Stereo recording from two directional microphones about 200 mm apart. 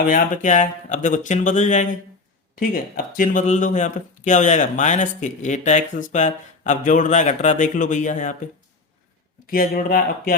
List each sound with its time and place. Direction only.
0.0 s speech: 40° left (ahead or behind)
9.5 s speech: 45° left (ahead or behind)